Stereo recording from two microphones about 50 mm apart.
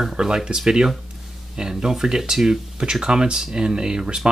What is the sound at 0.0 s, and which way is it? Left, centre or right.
Speech, centre.